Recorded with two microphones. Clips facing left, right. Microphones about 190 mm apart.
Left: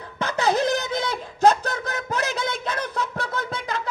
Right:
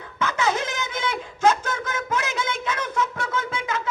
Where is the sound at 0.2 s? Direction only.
35° left (ahead or behind).